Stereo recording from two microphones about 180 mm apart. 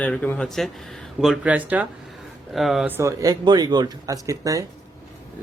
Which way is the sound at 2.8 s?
15° right (ahead or behind).